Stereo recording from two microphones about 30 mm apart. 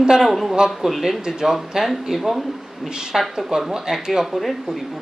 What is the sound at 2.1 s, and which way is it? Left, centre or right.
Speech, centre.